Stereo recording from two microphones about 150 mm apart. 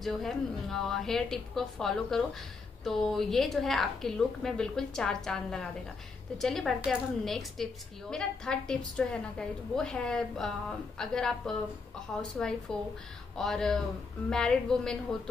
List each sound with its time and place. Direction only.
0.0 s a woman's voice: centre (ahead or behind)